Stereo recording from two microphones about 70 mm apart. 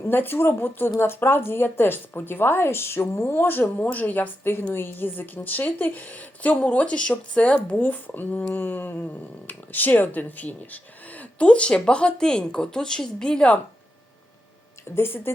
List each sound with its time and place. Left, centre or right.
0.0 s a woman's voice: left; by 13.6 s centre
14.9 s a woman's voice: left